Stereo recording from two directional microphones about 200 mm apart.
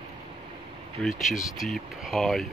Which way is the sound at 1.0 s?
5° left (ahead or behind).